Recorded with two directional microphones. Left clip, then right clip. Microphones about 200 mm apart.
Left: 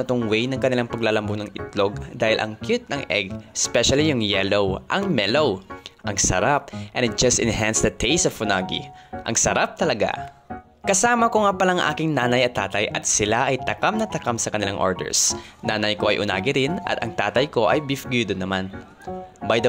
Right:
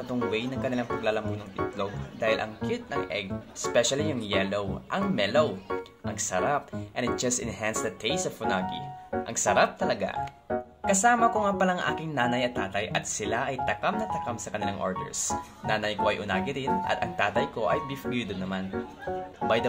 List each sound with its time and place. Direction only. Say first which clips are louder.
0.1 s speech: left 5 dB; 40° left (ahead or behind)